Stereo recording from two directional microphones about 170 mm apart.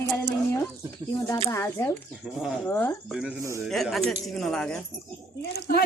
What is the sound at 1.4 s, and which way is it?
Speech, 15° left (ahead or behind).